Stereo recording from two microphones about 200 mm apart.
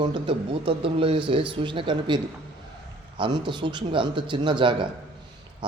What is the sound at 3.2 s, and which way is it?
A man's voice, 25° right (ahead or behind).